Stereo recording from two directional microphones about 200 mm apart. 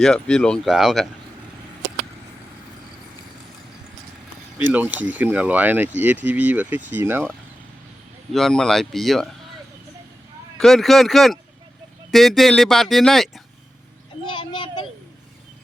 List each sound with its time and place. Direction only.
0.0 s speech: 5° left (ahead or behind)
4.5 s speech: 10° right (ahead or behind)
8.3 s speech: centre (ahead or behind)
10.6 s speech: centre (ahead or behind)
14.3 s a sound: 25° left (ahead or behind)